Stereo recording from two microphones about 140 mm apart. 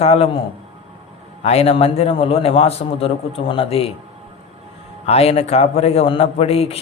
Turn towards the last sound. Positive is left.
turn(degrees=45)  # may be behind; listen again after turning